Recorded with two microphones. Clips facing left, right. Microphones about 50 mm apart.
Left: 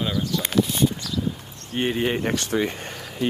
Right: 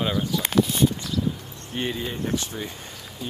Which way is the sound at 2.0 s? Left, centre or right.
Left.